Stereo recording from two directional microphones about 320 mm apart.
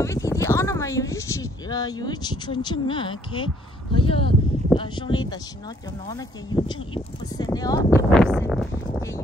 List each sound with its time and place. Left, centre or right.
0.0 s speech: centre